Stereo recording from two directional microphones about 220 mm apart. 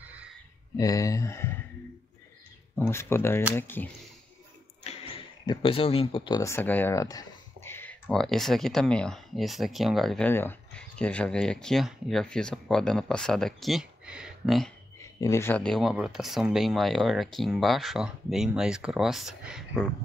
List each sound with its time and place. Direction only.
0.7 s speech: 15° left (ahead or behind)
2.7 s speech: 5° left (ahead or behind)
4.9 s a sound: 30° left (ahead or behind)
5.5 s speech: 25° left (ahead or behind); by 14.7 s centre (ahead or behind)
15.0 s speech: 15° left (ahead or behind)